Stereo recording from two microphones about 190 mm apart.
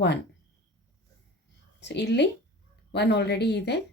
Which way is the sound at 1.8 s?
65° left (ahead or behind).